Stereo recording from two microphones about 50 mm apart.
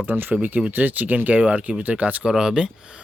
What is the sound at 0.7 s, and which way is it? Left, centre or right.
Speech, right.